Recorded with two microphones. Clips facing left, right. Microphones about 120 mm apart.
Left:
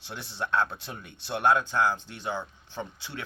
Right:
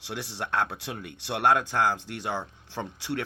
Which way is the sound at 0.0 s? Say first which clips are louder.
Right 1 dB; 65° right (ahead or behind).